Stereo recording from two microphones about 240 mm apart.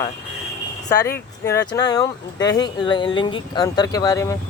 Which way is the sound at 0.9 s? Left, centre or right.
Centre.